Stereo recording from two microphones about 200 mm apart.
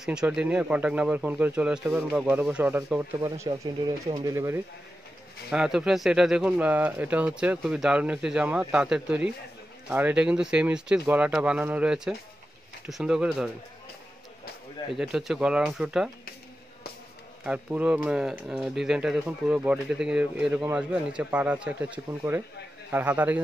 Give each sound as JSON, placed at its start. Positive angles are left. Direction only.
{"t": 0.0, "sound": "speech", "side_deg": -5}
{"t": 5.5, "sound": "speech", "side_deg": -5}
{"t": 15.0, "sound": "speech", "side_deg": 0}
{"t": 17.4, "sound": "speech", "side_deg": -5}